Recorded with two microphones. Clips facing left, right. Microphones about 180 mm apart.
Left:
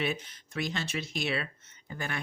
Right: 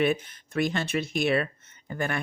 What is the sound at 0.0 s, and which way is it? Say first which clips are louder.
Speech: right 8 dB; 55° right (ahead or behind).